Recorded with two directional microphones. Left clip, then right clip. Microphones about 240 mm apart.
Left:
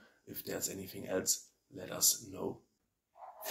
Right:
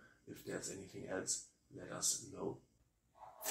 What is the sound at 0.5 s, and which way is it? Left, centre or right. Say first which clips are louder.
Speech: left 6 dB; left.